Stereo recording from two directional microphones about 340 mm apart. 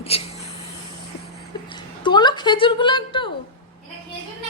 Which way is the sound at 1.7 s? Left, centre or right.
Centre.